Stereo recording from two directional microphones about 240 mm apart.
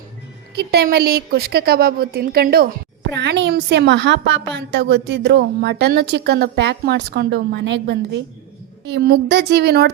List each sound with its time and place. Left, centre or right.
0.5 s a woman's voice: right